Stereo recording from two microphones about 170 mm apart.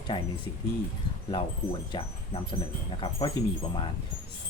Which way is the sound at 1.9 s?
30° left (ahead or behind).